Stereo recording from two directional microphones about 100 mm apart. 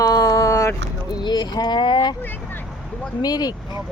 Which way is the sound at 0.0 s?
35° left (ahead or behind).